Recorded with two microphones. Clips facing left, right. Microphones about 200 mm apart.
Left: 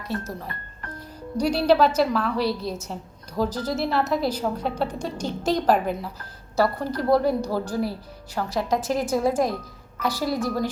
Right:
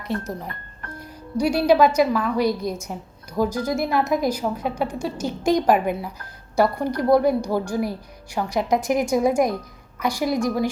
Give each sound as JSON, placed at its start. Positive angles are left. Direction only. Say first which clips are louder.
{"t": 1.4, "sound": "a woman's voice", "louder": "right 2 dB", "side_deg": -10}